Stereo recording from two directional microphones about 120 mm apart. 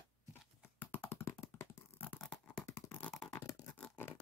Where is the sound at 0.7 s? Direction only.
15° left (ahead or behind).